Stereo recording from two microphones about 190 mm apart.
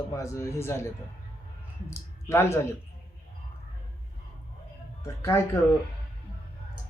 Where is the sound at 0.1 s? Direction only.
15° left (ahead or behind).